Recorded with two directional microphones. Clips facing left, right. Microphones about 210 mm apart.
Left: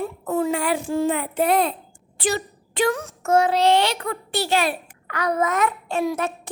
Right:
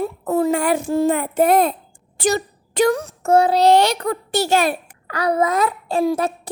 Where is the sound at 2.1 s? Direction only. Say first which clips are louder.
Right 5 dB; 45° right (ahead or behind).